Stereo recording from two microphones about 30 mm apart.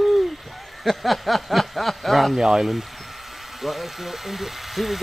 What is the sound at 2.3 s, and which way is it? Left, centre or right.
Speech, centre.